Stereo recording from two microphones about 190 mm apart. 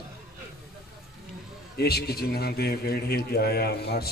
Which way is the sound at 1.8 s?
55° left (ahead or behind).